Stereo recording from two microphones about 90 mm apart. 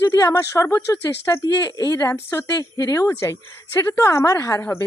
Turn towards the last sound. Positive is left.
turn(degrees=35)  # may be behind; listen again after turning